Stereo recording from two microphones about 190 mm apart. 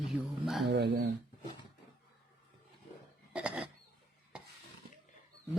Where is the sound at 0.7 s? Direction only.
65° right (ahead or behind).